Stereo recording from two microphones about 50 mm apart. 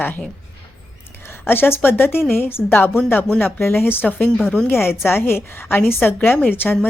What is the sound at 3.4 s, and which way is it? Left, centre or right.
A woman's voice, left.